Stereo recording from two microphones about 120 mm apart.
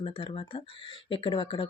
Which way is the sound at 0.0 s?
45° left (ahead or behind).